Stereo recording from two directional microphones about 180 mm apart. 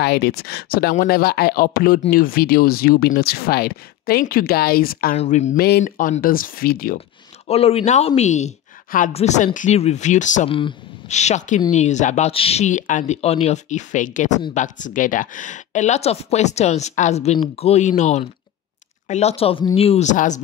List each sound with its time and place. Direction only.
0.0 s speech: 65° left (ahead or behind)
5.1 s speech: 40° left (ahead or behind)
5.6 s speech: 60° left (ahead or behind)
7.4 s speech: 35° left (ahead or behind)